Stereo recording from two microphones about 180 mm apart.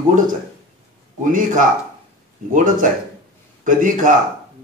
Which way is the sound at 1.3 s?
45° right (ahead or behind).